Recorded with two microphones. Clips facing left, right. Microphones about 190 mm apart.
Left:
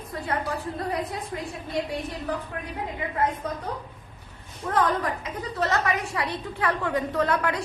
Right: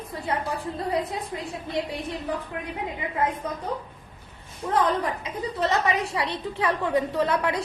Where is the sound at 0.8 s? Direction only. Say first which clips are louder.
Right 4 dB; 25° right (ahead or behind).